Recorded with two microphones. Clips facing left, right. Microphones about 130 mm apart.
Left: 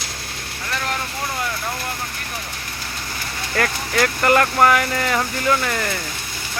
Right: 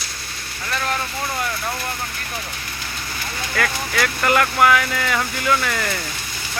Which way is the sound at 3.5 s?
35° left (ahead or behind).